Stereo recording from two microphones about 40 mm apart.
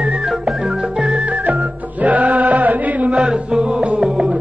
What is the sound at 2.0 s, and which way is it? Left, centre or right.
Chant, right.